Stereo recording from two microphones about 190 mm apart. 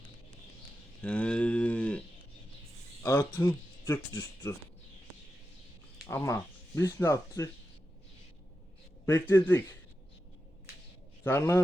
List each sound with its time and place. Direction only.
1.0 s a sound: 5° left (ahead or behind)
3.0 s speech: 15° left (ahead or behind)
6.1 s speech: 15° left (ahead or behind)
9.3 s speech: 15° left (ahead or behind)
11.2 s a man's voice: 15° left (ahead or behind)